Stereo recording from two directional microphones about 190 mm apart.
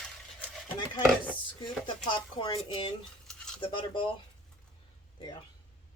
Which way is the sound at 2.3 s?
25° left (ahead or behind).